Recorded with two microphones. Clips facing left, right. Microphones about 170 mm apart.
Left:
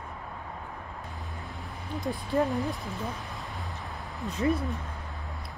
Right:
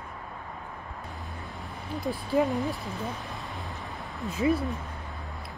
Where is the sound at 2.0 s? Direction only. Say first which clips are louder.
Right 1 dB; 20° left (ahead or behind).